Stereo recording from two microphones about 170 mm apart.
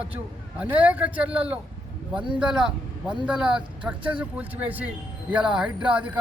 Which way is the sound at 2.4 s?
5° right (ahead or behind).